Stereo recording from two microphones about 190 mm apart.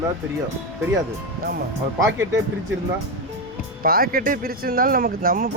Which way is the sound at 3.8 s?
50° right (ahead or behind).